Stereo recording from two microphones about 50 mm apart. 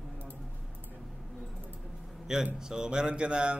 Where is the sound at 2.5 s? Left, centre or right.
Centre.